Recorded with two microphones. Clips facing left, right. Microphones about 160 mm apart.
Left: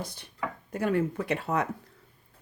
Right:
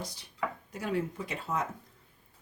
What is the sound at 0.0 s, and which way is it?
Speech, 55° left (ahead or behind).